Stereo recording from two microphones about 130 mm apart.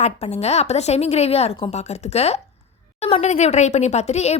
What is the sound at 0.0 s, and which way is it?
Speech, 55° left (ahead or behind).